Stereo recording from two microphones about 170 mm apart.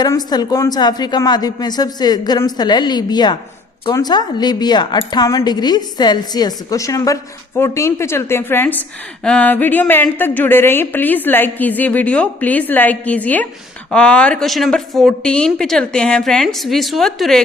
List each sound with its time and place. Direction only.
0.0 s a woman's voice: 25° left (ahead or behind); by 17.4 s centre (ahead or behind)